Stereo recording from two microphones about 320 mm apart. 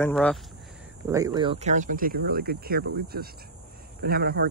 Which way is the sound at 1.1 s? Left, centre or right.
Centre.